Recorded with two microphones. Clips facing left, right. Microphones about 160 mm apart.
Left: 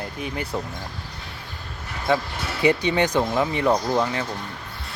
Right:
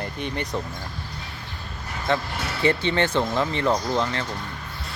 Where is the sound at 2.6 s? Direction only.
15° left (ahead or behind).